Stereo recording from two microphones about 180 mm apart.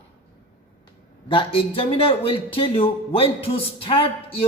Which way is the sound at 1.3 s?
30° left (ahead or behind).